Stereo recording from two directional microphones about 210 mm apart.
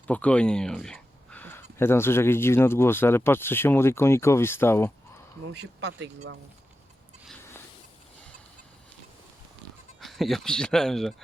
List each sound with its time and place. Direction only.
0.1 s speech: 5° left (ahead or behind)
5.5 s speech: 55° right (ahead or behind)
10.0 s speech: centre (ahead or behind)